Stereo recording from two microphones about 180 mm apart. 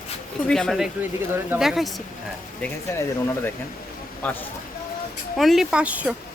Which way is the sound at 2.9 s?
15° left (ahead or behind).